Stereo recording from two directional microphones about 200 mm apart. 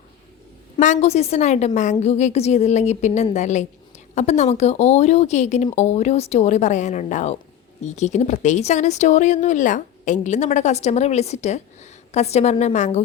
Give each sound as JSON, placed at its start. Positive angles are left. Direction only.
{"t": 0.8, "sound": "speech", "side_deg": 35}